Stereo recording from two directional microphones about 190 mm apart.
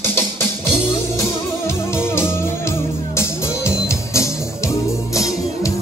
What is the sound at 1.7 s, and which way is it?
Music, 15° left (ahead or behind).